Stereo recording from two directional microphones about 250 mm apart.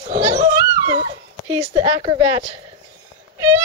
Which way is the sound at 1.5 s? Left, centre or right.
Centre.